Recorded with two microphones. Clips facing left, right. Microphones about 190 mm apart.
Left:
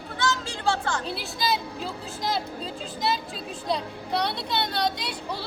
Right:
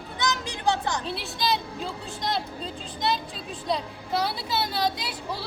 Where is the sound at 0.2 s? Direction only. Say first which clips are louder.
Left 1 dB; 20° right (ahead or behind).